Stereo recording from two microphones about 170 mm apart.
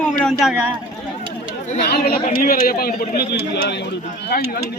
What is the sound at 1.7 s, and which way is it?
A man's voice, 75° left (ahead or behind).